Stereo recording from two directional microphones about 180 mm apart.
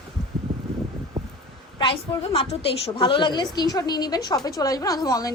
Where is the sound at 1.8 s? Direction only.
30° left (ahead or behind).